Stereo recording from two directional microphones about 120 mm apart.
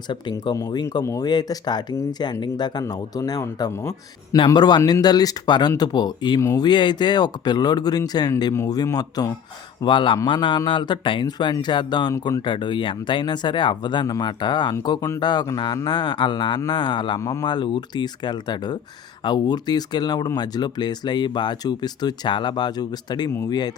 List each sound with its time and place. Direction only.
0.1 s speech: 40° left (ahead or behind)
9.8 s a man's voice: 45° left (ahead or behind)
17.2 s speech: 25° left (ahead or behind)
17.4 s speech: 40° left (ahead or behind)